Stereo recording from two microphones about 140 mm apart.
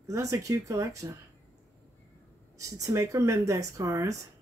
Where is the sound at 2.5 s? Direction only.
25° right (ahead or behind).